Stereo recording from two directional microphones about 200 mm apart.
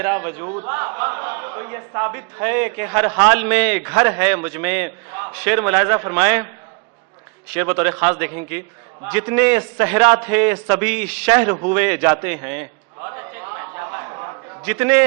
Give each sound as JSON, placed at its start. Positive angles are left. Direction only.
{"t": 0.0, "sound": "a man's voice", "side_deg": -15}
{"t": 7.5, "sound": "a man's voice", "side_deg": -10}
{"t": 8.2, "sound": "a man's voice", "side_deg": -10}
{"t": 11.7, "sound": "a sound", "side_deg": -10}